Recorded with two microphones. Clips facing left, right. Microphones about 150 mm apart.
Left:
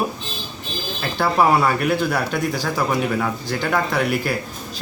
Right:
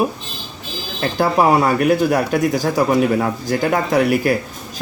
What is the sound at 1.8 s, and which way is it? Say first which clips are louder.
A man's voice: right 5 dB; 40° right (ahead or behind).